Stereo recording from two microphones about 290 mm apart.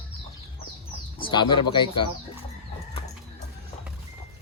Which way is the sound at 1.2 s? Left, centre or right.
Centre.